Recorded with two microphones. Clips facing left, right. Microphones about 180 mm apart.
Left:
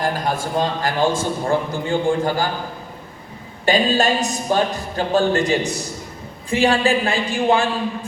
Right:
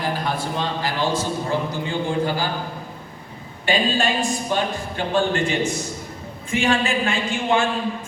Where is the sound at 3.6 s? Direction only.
40° left (ahead or behind).